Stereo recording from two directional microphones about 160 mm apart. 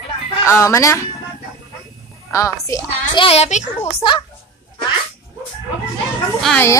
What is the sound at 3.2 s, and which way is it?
A child's voice, 40° left (ahead or behind).